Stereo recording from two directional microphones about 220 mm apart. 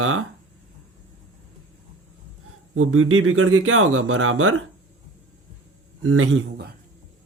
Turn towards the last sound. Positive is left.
turn(degrees=-55)  # may be behind; listen again after turning